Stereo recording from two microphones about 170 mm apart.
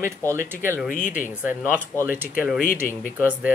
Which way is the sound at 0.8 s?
55° left (ahead or behind).